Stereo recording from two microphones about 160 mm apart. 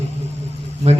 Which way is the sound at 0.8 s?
40° right (ahead or behind).